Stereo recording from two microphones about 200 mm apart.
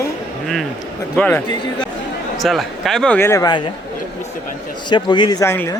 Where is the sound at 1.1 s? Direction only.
5° left (ahead or behind).